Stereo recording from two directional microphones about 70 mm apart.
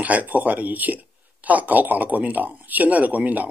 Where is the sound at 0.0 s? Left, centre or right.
Right.